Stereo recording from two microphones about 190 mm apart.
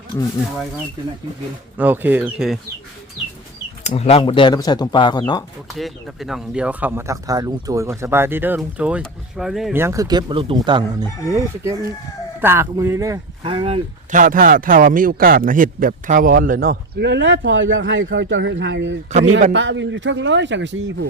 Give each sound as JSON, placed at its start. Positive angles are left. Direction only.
{"t": 1.8, "sound": "speech", "side_deg": -10}
{"t": 3.8, "sound": "speech", "side_deg": 30}
{"t": 5.7, "sound": "speech", "side_deg": 0}
{"t": 9.7, "sound": "speech", "side_deg": -15}
{"t": 14.1, "sound": "a man's voice", "side_deg": -45}